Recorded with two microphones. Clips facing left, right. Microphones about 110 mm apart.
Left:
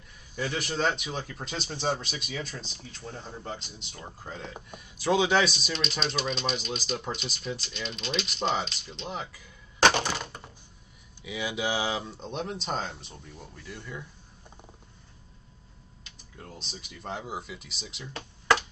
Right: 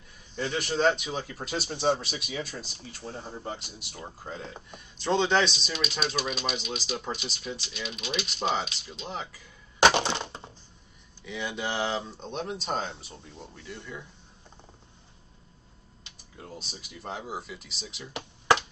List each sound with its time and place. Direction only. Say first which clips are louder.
0.4 s speech: right 3 dB; centre (ahead or behind)
4.4 s speech: left 1 dB; 5° left (ahead or behind)
9.8 s a sound: right 1 dB; 20° right (ahead or behind)
11.2 s speech: left 2 dB; 5° left (ahead or behind)
16.3 s speech: right 1 dB; 5° right (ahead or behind)
18.0 s a sound: right 1 dB; 15° right (ahead or behind)